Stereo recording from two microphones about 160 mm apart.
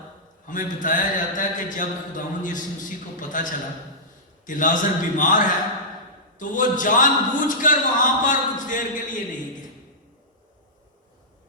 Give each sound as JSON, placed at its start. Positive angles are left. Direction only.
{"t": 0.4, "sound": "a man's voice", "side_deg": 55}
{"t": 6.4, "sound": "a man's voice", "side_deg": 55}